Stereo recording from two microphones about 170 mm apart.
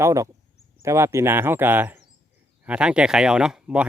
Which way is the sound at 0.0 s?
20° right (ahead or behind).